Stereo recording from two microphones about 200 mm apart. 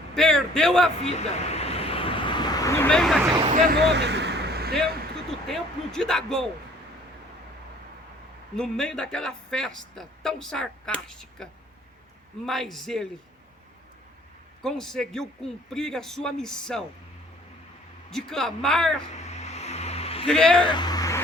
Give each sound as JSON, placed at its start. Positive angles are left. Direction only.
{"t": 0.1, "sound": "speech", "side_deg": 5}
{"t": 1.0, "sound": "vehicle", "side_deg": 30}
{"t": 3.5, "sound": "speech", "side_deg": -40}
{"t": 3.8, "sound": "vehicle", "side_deg": -60}
{"t": 5.5, "sound": "speech", "side_deg": 5}
{"t": 8.5, "sound": "speech", "side_deg": 5}
{"t": 12.5, "sound": "speech", "side_deg": 0}
{"t": 14.6, "sound": "speech", "side_deg": 0}
{"t": 18.1, "sound": "speech", "side_deg": 0}
{"t": 19.1, "sound": "vehicle", "side_deg": 35}
{"t": 20.2, "sound": "speech", "side_deg": 5}
{"t": 20.6, "sound": "a sound", "side_deg": 20}